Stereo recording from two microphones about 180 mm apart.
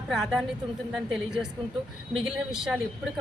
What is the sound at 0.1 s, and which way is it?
Speech, centre (ahead or behind).